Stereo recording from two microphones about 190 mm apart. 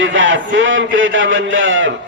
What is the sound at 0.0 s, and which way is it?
A man's voice, 85° right.